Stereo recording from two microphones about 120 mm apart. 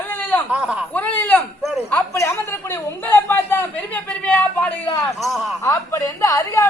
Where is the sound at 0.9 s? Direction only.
15° left (ahead or behind).